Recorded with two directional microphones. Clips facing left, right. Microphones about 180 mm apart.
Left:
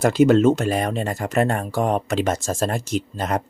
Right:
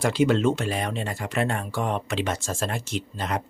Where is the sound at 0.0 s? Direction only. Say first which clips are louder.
Left 6 dB; 45° left (ahead or behind).